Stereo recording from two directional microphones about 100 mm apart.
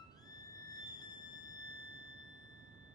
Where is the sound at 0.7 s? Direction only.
45° left (ahead or behind).